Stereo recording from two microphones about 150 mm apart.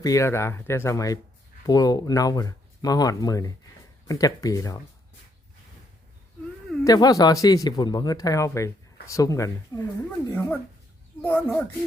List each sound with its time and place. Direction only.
0.0 s speech: 20° left (ahead or behind)
6.8 s speech: 25° left (ahead or behind)